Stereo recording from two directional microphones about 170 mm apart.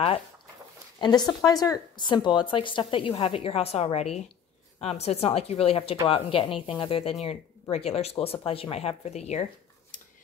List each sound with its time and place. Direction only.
1.0 s a woman's voice: 25° left (ahead or behind); by 9.9 s 40° left (ahead or behind)